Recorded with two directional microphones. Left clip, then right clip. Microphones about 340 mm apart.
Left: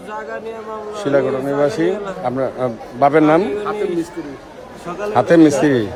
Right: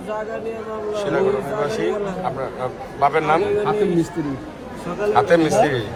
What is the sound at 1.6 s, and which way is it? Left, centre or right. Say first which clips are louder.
Speech: left 4 dB; left.